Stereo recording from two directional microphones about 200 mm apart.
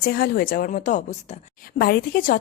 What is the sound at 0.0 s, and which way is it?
A woman's voice, 50° left (ahead or behind).